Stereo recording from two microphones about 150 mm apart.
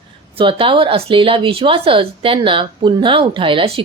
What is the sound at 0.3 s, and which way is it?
Speech, 35° right (ahead or behind).